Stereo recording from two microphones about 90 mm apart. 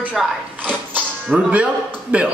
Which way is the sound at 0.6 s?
15° right (ahead or behind).